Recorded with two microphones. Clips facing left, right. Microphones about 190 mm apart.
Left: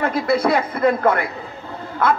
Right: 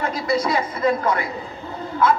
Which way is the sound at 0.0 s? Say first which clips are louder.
Left 4 dB; 60° left (ahead or behind).